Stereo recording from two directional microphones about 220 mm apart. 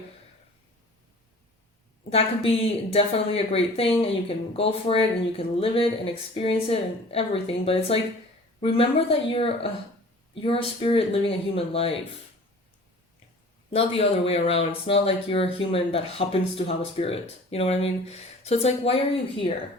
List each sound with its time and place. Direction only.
2.0 s speech: 25° left (ahead or behind)
13.7 s speech: 25° left (ahead or behind)